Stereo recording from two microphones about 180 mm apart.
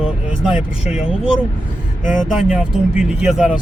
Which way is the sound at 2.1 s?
5° right (ahead or behind).